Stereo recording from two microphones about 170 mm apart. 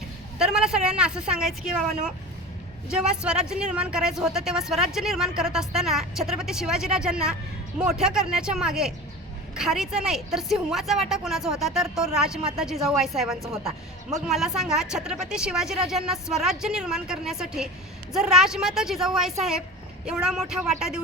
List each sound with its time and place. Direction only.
0.3 s a woman's voice: 5° right (ahead or behind)